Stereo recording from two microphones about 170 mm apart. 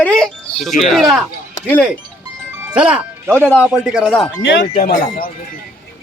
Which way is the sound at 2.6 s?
5° right (ahead or behind).